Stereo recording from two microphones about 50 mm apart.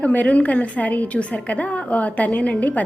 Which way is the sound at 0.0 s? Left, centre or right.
Left.